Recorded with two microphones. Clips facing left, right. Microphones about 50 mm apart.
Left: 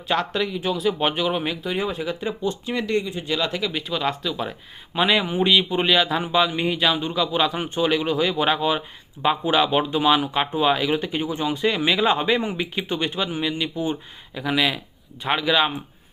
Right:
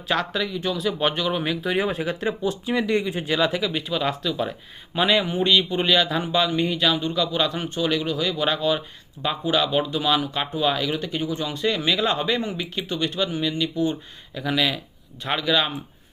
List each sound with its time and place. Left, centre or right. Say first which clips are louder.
0.1 s speech: left 1 dB; centre
1.7 s speech: right 2 dB; centre